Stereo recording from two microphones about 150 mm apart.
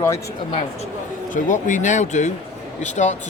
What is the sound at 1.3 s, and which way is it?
Speech, 55° left (ahead or behind).